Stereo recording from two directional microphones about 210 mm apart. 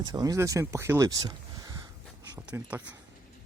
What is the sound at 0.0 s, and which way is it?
Speech, 20° right (ahead or behind).